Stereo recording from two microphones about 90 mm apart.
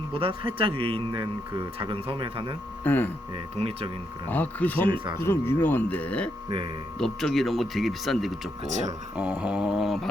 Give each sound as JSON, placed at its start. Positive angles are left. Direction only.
{"t": 0.1, "sound": "speech", "side_deg": -80}
{"t": 2.8, "sound": "speech", "side_deg": 15}
{"t": 3.3, "sound": "speech", "side_deg": -90}
{"t": 4.3, "sound": "speech", "side_deg": 20}
{"t": 4.9, "sound": "speech", "side_deg": -60}
{"t": 5.2, "sound": "speech", "side_deg": 25}
{"t": 9.4, "sound": "speech", "side_deg": -10}